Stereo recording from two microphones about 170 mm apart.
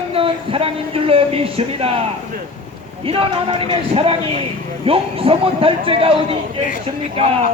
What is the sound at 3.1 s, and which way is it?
Speech, 30° right (ahead or behind).